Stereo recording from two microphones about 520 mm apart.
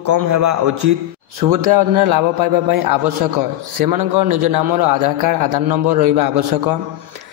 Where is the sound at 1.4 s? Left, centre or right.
Right.